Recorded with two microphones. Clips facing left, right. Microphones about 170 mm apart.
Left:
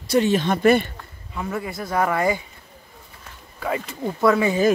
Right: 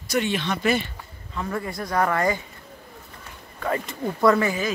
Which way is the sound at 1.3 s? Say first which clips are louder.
Left 1 dB; 10° left (ahead or behind).